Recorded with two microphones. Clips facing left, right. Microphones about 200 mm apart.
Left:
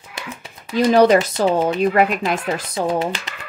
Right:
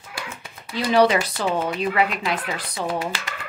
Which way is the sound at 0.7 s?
45° left (ahead or behind).